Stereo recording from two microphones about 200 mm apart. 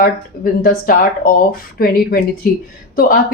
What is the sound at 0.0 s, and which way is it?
Speech, 45° left (ahead or behind).